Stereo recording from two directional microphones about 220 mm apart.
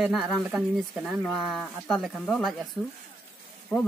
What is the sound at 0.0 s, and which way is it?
Speech, centre (ahead or behind).